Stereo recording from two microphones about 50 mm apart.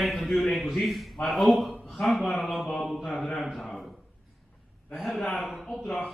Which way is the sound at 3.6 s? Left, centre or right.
Centre.